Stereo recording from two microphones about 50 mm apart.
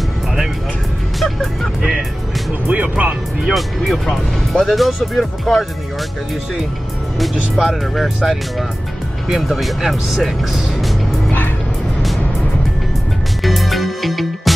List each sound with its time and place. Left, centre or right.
1.2 s music: centre
2.7 s music: right
3.5 s speech: centre
7.2 s speech: centre
13.4 s music: centre